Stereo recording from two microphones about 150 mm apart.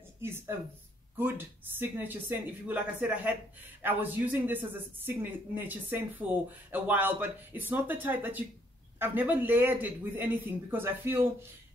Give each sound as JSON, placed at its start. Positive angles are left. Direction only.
{"t": 0.2, "sound": "a man's voice", "side_deg": -15}